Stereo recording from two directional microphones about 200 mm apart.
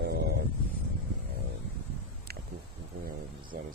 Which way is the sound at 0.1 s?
50° right (ahead or behind).